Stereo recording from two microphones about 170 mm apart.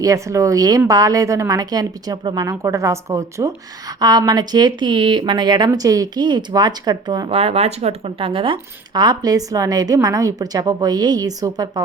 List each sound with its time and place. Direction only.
0.0 s a woman's voice: 20° right (ahead or behind)